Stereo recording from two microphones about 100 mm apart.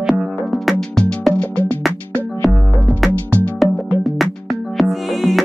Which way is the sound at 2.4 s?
Centre (ahead or behind).